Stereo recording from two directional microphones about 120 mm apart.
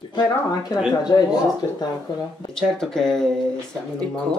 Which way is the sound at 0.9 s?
35° left (ahead or behind).